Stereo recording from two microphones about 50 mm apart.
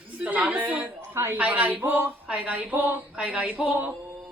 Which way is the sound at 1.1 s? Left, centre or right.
Right.